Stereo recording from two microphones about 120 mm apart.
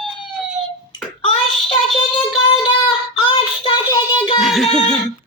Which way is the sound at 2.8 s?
45° left (ahead or behind).